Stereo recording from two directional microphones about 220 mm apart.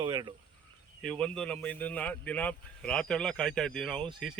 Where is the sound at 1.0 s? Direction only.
5° left (ahead or behind).